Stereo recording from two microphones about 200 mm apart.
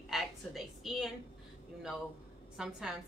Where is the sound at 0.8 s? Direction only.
Centre (ahead or behind).